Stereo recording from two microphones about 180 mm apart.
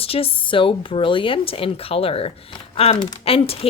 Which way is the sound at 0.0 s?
30° left (ahead or behind).